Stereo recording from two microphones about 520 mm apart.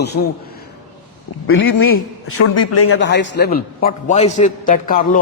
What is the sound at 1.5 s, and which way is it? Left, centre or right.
A man's voice, left.